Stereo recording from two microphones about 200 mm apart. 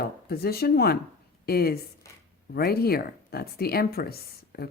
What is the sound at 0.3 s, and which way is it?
Speech, 50° left (ahead or behind).